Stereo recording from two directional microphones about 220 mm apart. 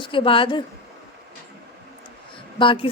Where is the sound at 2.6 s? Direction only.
25° left (ahead or behind).